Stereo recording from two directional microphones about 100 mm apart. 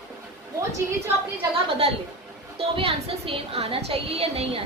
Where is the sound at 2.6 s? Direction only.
75° right (ahead or behind).